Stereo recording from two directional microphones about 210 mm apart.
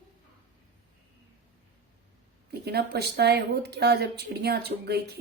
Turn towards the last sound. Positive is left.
turn(degrees=-50)  # may be behind; listen again after turning